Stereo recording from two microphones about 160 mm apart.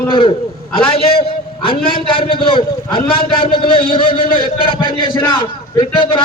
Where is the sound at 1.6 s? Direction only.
35° left (ahead or behind).